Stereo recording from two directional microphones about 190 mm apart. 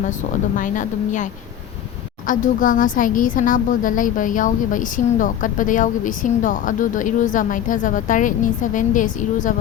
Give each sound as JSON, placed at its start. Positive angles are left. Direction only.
{"t": 0.5, "sound": "speech", "side_deg": 45}